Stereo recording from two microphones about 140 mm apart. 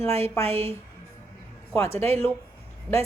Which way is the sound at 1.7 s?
15° left (ahead or behind).